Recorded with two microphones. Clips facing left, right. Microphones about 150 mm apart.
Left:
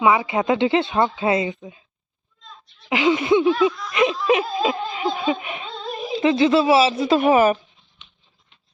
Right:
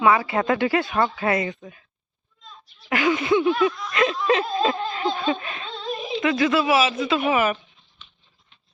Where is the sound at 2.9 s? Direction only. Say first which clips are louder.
Left 3 dB; 20° left (ahead or behind).